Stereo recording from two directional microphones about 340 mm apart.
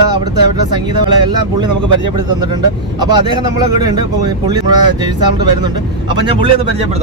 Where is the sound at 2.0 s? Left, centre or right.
Right.